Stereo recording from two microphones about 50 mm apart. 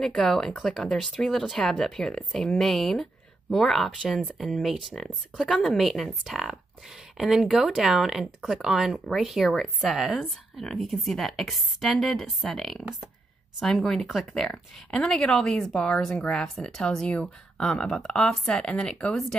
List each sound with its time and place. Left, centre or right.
0.0 s speech: centre
5.6 s speech: centre